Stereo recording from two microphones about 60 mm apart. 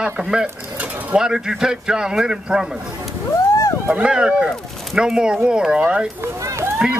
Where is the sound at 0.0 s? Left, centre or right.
Centre.